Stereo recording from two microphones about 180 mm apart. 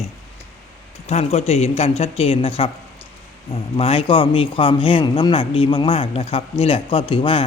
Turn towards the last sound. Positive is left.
turn(degrees=30)  # may be behind; listen again after turning